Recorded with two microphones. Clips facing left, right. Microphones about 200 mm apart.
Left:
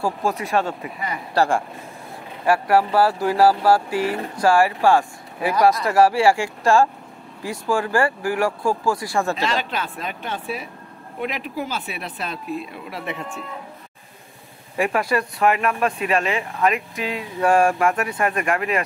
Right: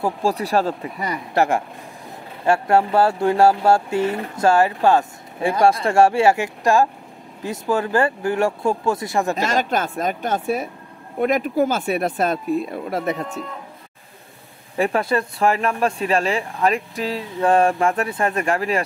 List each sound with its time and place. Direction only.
0.0 s speech: 30° right (ahead or behind)
1.3 s speech: 20° right (ahead or behind)
9.4 s speech: 45° right (ahead or behind)
14.8 s speech: 30° right (ahead or behind)
17.5 s speech: 20° right (ahead or behind)